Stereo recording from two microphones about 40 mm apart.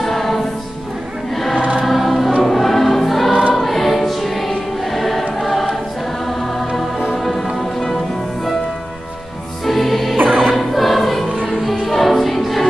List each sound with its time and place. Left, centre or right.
0.0 s music: centre
1.3 s choir: centre
7.5 s music: centre
9.7 s music: centre
10.1 s music: right
10.4 s choir: centre
11.8 s music: centre